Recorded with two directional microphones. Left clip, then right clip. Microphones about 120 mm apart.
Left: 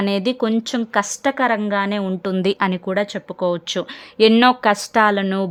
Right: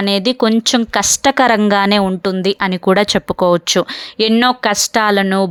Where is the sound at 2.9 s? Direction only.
60° right (ahead or behind); by 3.9 s 45° right (ahead or behind).